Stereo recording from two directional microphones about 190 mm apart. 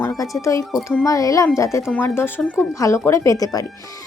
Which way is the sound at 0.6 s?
Centre (ahead or behind).